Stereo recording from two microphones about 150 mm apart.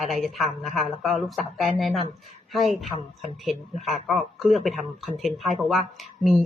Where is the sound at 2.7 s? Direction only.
45° right (ahead or behind).